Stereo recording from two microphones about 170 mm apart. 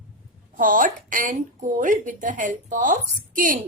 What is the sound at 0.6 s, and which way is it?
A woman's voice, 50° right (ahead or behind).